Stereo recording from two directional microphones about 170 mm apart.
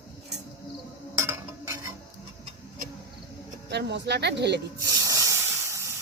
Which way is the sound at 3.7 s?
80° right.